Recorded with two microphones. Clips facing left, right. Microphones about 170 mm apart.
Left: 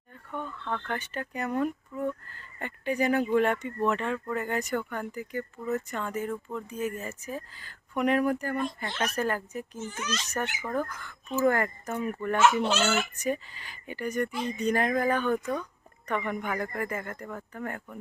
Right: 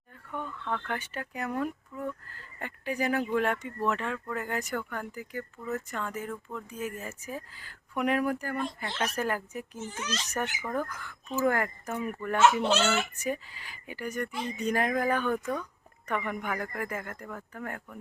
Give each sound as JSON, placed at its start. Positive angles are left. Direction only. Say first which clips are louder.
{"t": 0.6, "sound": "speech", "louder": "even", "side_deg": -5}
{"t": 10.0, "sound": "a child's voice", "louder": "left 1 dB", "side_deg": -30}
{"t": 10.6, "sound": "speech", "louder": "left 1 dB", "side_deg": -5}
{"t": 13.2, "sound": "speech", "louder": "left 3 dB", "side_deg": -5}